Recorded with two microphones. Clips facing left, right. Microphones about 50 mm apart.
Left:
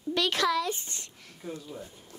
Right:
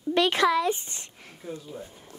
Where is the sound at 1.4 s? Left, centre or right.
Centre.